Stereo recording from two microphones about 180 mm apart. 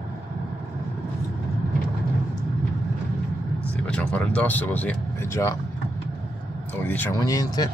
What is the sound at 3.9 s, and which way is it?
Speech, 5° left (ahead or behind).